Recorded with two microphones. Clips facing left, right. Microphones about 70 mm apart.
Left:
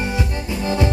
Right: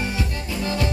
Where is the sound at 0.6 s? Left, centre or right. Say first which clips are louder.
Left 4 dB; left.